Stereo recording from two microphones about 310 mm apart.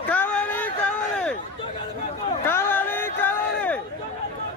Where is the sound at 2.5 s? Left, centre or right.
Centre.